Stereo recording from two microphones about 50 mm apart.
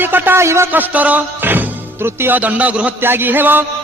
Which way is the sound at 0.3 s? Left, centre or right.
Right.